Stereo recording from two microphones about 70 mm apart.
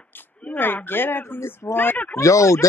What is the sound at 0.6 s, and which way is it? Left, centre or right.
Speech, left.